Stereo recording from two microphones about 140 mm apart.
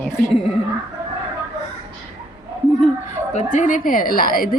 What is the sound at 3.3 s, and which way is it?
A woman's voice, 60° left (ahead or behind).